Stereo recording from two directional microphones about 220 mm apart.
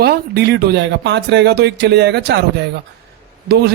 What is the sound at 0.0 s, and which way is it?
Speech, 45° right (ahead or behind).